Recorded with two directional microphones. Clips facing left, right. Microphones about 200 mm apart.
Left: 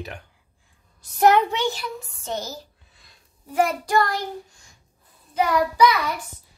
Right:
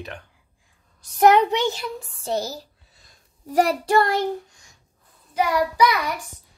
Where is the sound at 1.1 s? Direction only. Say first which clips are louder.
Right 2 dB; 15° right (ahead or behind).